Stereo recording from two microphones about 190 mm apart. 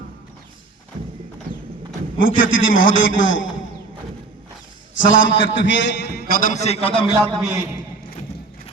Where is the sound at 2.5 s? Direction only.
90° left.